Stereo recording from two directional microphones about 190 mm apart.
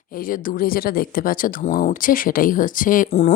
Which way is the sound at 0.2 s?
45° left (ahead or behind).